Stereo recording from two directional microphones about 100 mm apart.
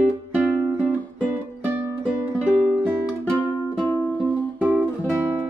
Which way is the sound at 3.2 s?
15° left (ahead or behind).